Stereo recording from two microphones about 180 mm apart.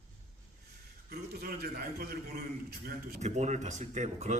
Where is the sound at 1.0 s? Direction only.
60° right (ahead or behind).